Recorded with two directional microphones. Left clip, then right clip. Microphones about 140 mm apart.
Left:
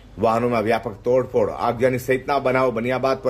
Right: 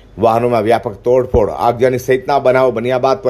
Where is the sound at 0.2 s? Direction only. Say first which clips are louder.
Right 7 dB; 35° right (ahead or behind).